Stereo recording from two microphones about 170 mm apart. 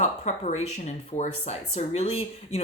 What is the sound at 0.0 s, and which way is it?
Speech, 45° left (ahead or behind).